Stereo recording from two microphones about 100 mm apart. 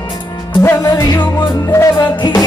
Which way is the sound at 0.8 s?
30° left (ahead or behind).